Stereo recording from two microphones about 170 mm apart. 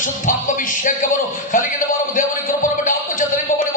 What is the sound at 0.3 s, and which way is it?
Music, 50° left (ahead or behind).